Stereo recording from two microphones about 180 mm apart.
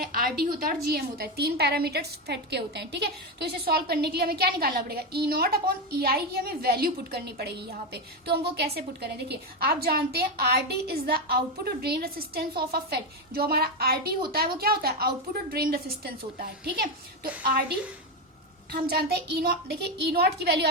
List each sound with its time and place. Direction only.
0.0 s a woman's voice: 55° right (ahead or behind)
18.7 s a woman's voice: 60° right (ahead or behind)